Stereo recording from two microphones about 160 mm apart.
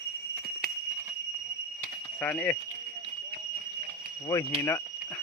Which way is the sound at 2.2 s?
10° left (ahead or behind).